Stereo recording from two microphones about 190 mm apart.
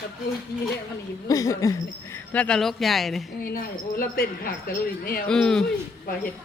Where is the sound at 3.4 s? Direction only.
50° left (ahead or behind).